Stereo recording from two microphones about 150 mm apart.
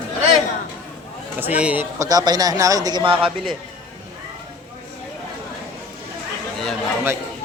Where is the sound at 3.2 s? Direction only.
Centre (ahead or behind).